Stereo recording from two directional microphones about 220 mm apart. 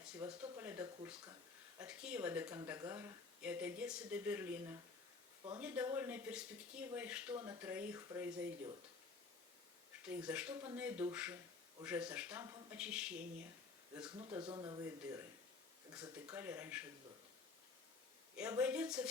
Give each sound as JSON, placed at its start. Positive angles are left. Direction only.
{"t": 0.2, "sound": "speech", "side_deg": -15}
{"t": 10.1, "sound": "speech", "side_deg": -5}
{"t": 14.2, "sound": "speech", "side_deg": -20}
{"t": 18.3, "sound": "speech", "side_deg": -5}